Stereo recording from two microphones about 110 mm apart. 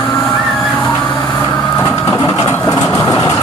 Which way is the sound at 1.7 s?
25° left (ahead or behind).